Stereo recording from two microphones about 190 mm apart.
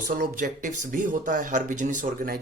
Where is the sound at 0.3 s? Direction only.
40° right (ahead or behind).